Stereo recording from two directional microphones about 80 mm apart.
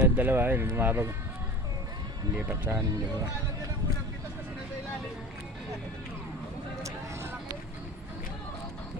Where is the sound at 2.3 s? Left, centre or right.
Right.